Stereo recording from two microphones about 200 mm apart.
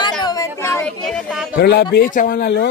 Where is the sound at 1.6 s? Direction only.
55° left (ahead or behind).